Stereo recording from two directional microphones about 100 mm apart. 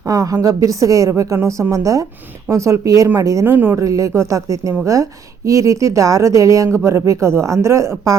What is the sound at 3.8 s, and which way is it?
Speech, 35° right (ahead or behind).